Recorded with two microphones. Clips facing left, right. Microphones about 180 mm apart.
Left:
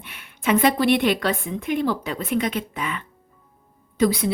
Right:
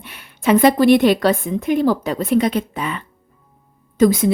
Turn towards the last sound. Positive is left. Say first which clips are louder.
# right 6 dB
turn(degrees=-45)  # may be behind; listen again after turning